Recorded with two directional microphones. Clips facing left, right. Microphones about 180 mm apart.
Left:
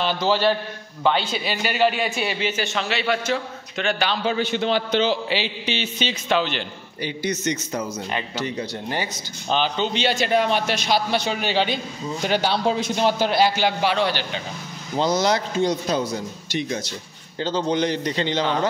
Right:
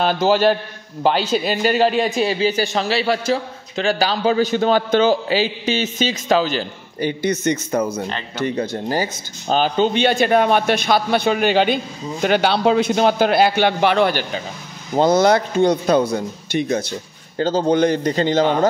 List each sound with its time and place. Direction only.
0.0 s a man's voice: 45° right (ahead or behind)
8.8 s a man's voice: 40° right (ahead or behind)